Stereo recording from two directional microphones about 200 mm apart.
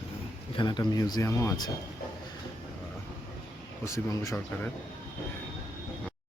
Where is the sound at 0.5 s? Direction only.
20° left (ahead or behind).